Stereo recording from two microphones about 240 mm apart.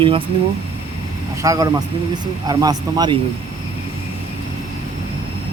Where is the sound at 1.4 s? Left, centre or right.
Centre.